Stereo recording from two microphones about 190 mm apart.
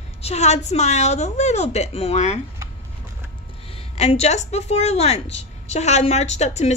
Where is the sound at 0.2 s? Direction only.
35° left (ahead or behind).